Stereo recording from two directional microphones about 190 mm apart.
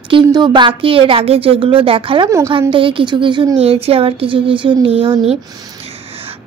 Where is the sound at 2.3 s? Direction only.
15° right (ahead or behind).